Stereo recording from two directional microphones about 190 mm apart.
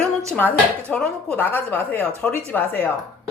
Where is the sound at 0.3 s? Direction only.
5° left (ahead or behind).